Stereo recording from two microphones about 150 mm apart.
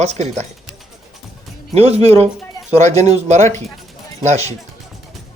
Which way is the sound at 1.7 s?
45° right (ahead or behind).